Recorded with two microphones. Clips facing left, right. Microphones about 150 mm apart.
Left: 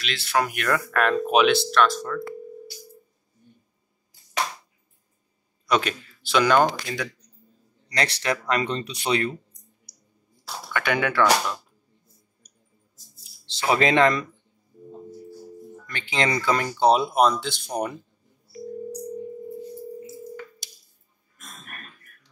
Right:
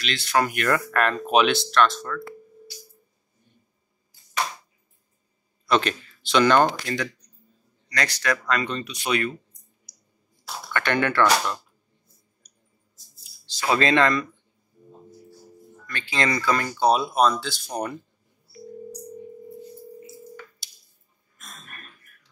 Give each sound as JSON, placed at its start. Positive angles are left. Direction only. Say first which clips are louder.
{"t": 0.0, "sound": "speech", "louder": "right 1 dB", "side_deg": 5}
{"t": 2.0, "sound": "speech", "louder": "left 3 dB", "side_deg": 15}
{"t": 5.7, "sound": "speech", "louder": "right 1 dB", "side_deg": 5}
{"t": 7.9, "sound": "speech", "louder": "even", "side_deg": 25}
{"t": 10.7, "sound": "speech", "louder": "right 1 dB", "side_deg": 10}
{"t": 13.6, "sound": "speech", "louder": "left 1 dB", "side_deg": 15}
{"t": 15.9, "sound": "speech", "louder": "even", "side_deg": 20}